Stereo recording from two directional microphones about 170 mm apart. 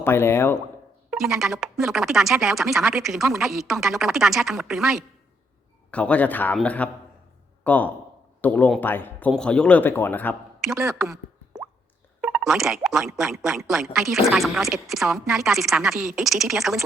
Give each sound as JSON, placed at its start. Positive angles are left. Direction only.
{"t": 0.0, "sound": "a man's voice", "side_deg": 15}
{"t": 1.1, "sound": "a man's voice", "side_deg": 0}
{"t": 10.8, "sound": "speech", "side_deg": -20}
{"t": 12.2, "sound": "speech", "side_deg": -5}